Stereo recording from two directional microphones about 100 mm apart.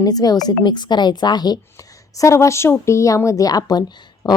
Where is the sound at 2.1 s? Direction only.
30° left (ahead or behind).